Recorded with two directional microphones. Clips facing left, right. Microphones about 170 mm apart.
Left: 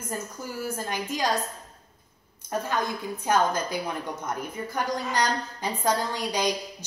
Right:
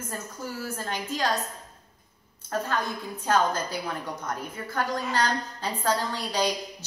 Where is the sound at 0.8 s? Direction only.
15° left (ahead or behind).